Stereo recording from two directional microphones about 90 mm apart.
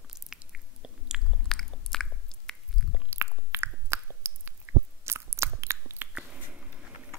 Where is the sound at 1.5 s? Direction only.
5° left (ahead or behind).